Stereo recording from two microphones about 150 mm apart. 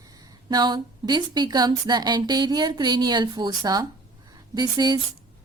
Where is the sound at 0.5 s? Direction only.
30° right (ahead or behind).